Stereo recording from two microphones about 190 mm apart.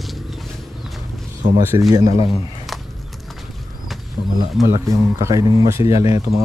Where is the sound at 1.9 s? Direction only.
20° right (ahead or behind).